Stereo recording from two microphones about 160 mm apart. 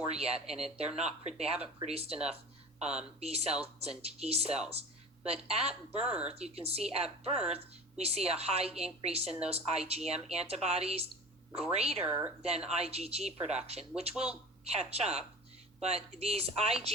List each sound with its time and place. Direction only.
0.1 s a woman's voice: 40° right (ahead or behind)
3.2 s a woman's voice: 40° right (ahead or behind)
4.7 s a sound: 40° right (ahead or behind)
5.5 s a woman's voice: 40° right (ahead or behind)
12.0 s a woman's voice: 10° right (ahead or behind)
12.4 s a woman's voice: 40° right (ahead or behind)